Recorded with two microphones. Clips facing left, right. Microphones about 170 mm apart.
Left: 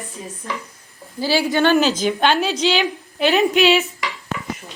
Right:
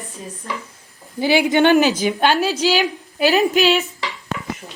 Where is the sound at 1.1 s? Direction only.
20° right (ahead or behind); by 3.8 s centre (ahead or behind).